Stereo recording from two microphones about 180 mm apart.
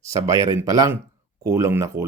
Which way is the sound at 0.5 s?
20° right (ahead or behind).